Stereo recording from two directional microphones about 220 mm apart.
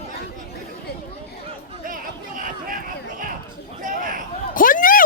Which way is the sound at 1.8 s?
40° right (ahead or behind).